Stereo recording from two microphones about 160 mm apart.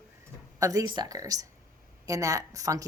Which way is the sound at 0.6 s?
20° right (ahead or behind).